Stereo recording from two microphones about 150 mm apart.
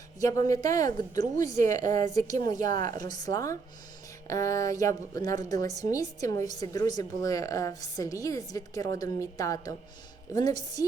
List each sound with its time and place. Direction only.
0.2 s a woman's voice: 25° left (ahead or behind)